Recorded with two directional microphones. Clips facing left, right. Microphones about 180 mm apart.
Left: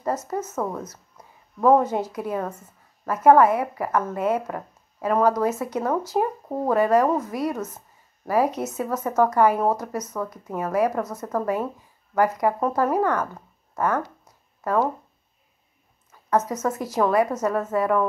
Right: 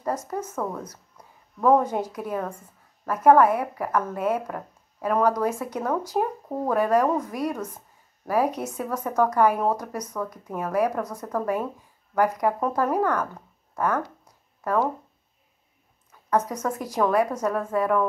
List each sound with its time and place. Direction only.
0.3 s speech: 5° left (ahead or behind)
1.1 s a sound: 5° left (ahead or behind)
2.1 s speech: 5° left (ahead or behind)
16.1 s speech: 5° left (ahead or behind)